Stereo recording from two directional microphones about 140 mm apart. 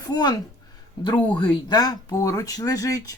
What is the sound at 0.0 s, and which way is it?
Speech, 30° left (ahead or behind).